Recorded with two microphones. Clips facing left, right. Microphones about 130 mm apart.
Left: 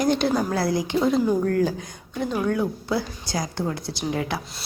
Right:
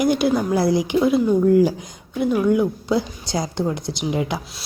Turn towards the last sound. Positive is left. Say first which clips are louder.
# right 3 dB
turn(degrees=-20)  # may be behind; listen again after turning